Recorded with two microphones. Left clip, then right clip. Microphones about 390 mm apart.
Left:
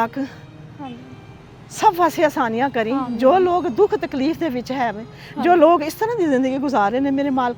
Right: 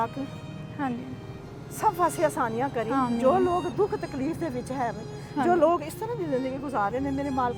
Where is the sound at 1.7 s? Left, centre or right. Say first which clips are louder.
Left 9 dB; left.